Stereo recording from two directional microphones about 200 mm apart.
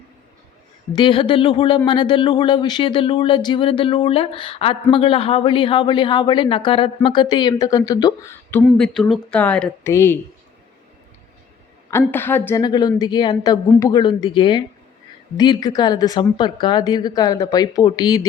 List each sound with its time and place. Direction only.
0.9 s speech: 25° left (ahead or behind)
11.9 s a woman's voice: 10° left (ahead or behind)